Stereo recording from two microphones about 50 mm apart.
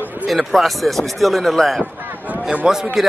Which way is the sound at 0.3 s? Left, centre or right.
Centre.